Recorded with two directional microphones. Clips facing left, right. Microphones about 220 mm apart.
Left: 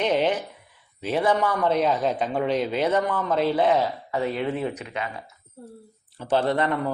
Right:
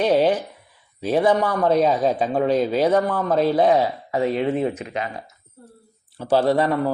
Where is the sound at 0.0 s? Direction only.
35° right (ahead or behind).